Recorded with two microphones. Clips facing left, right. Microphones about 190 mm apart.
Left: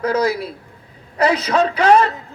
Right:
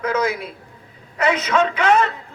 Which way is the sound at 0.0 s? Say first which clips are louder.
Left 3 dB; 35° left (ahead or behind).